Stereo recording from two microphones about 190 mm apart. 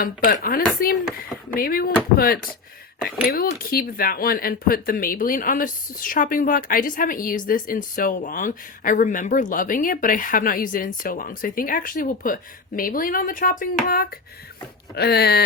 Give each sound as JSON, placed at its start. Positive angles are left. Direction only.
{"t": 0.0, "sound": "speech", "side_deg": 50}